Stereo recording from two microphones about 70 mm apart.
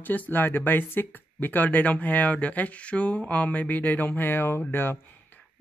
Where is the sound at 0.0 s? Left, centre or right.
Left.